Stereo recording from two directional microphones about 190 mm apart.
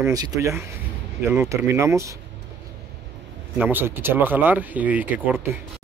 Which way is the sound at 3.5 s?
10° right (ahead or behind).